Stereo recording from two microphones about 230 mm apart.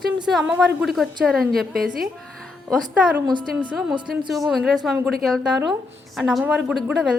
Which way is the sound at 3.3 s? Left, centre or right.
Centre.